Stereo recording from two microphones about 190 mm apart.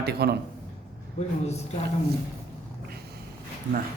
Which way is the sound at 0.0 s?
55° right (ahead or behind).